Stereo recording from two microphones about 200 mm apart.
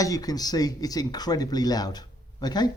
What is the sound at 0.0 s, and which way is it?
Speech, 20° left (ahead or behind).